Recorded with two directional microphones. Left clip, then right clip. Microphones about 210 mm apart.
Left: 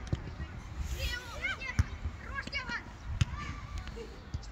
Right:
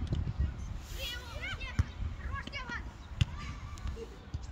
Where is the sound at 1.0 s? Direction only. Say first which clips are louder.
Left 4 dB; 5° right (ahead or behind).